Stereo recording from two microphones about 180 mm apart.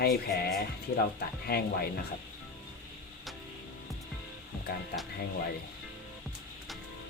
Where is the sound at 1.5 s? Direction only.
55° left (ahead or behind).